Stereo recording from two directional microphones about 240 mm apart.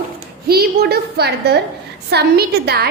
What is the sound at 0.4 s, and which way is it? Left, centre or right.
A woman's voice, right.